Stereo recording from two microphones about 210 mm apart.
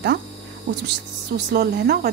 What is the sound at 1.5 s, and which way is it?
Speech, 50° right (ahead or behind).